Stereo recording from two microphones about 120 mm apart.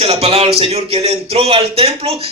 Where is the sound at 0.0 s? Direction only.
60° right (ahead or behind).